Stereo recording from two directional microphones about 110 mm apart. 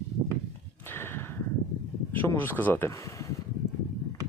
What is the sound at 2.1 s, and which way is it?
Speech, 20° left (ahead or behind).